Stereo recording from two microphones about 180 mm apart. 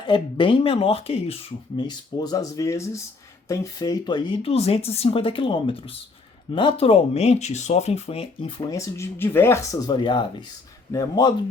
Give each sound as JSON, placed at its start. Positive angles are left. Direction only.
{"t": 0.0, "sound": "speech", "side_deg": 25}
{"t": 8.7, "sound": "speech", "side_deg": 15}